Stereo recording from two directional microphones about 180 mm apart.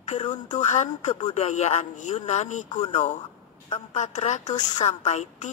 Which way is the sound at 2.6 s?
25° left (ahead or behind).